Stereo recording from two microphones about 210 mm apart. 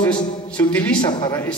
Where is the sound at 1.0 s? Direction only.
20° left (ahead or behind).